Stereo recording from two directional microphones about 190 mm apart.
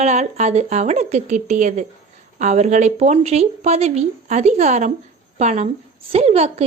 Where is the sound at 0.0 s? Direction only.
35° right (ahead or behind).